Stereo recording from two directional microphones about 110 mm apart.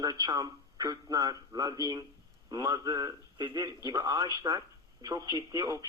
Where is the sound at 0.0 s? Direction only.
35° right (ahead or behind).